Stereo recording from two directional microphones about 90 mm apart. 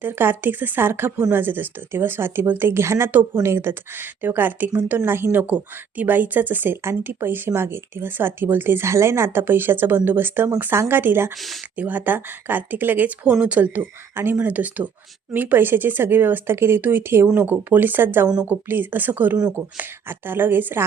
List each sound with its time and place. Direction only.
0.0 s speech: 25° right (ahead or behind)
11.3 s speech: centre (ahead or behind)
11.8 s speech: 20° right (ahead or behind)